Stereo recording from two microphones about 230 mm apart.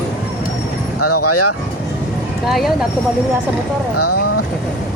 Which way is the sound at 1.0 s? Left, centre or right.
Left.